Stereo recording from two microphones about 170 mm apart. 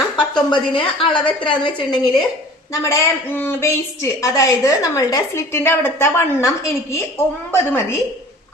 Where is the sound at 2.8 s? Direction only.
10° left (ahead or behind).